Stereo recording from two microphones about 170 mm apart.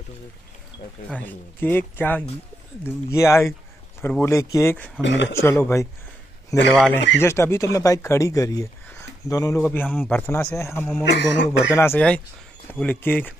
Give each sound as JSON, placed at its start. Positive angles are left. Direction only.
{"t": 1.1, "sound": "speech", "side_deg": 10}
{"t": 5.0, "sound": "speech", "side_deg": 90}
{"t": 5.3, "sound": "speech", "side_deg": 15}
{"t": 9.6, "sound": "speech", "side_deg": 10}
{"t": 11.1, "sound": "speech", "side_deg": 90}
{"t": 11.7, "sound": "speech", "side_deg": 15}